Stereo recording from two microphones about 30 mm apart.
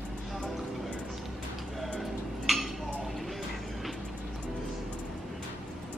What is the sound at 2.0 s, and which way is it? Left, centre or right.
Tick-tock, centre.